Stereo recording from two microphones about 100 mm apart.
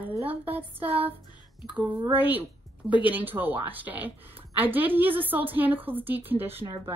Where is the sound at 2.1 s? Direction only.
20° right (ahead or behind).